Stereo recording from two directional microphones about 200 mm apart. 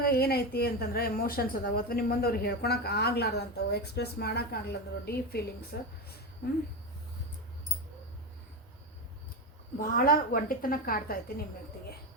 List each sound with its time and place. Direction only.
0.0 s a woman's voice: 50° left (ahead or behind)
9.8 s a woman's voice: 45° left (ahead or behind)